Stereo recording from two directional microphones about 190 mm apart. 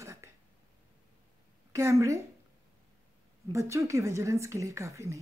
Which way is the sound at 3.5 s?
15° right (ahead or behind).